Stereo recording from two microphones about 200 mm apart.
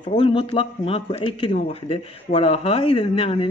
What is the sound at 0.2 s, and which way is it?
Speech, 25° left (ahead or behind).